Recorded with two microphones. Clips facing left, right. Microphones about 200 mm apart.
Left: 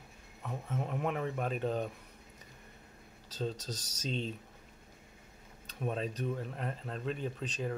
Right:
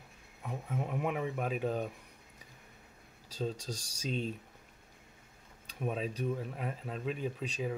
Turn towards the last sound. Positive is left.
turn(degrees=-5)  # may be behind; listen again after turning